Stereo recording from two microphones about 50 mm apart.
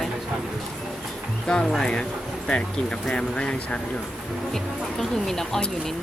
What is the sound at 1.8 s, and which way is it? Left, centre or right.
Speech, centre.